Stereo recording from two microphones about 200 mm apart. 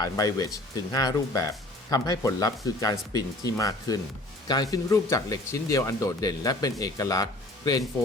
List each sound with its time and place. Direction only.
0.0 s speech: 15° left (ahead or behind)